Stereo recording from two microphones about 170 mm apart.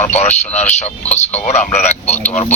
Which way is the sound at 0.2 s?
40° left (ahead or behind).